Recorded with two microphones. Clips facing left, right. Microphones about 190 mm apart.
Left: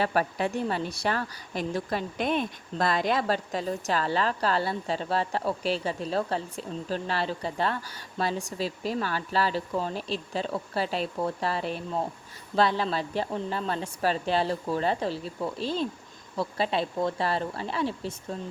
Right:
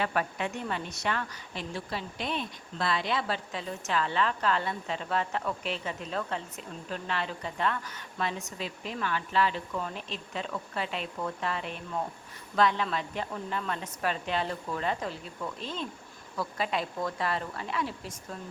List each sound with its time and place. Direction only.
0.0 s a woman's voice: 35° left (ahead or behind)